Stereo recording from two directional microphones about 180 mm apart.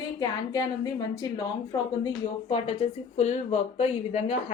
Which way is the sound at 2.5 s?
35° left (ahead or behind).